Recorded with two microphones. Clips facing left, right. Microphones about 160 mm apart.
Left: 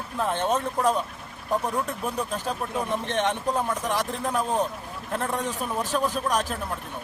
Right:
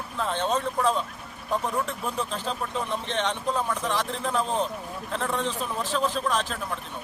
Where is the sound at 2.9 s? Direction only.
15° left (ahead or behind).